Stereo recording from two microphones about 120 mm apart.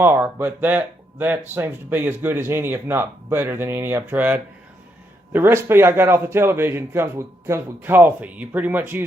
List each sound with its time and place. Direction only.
0.0 s speech: 15° right (ahead or behind)